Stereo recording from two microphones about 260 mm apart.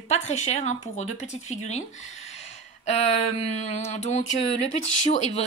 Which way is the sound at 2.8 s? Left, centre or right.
Left.